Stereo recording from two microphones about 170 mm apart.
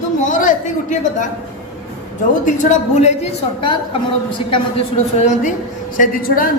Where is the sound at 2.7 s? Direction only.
40° left (ahead or behind).